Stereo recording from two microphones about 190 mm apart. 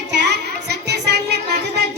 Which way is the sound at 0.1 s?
60° right (ahead or behind).